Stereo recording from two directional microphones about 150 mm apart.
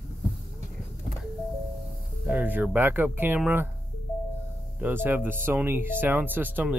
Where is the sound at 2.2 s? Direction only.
10° right (ahead or behind).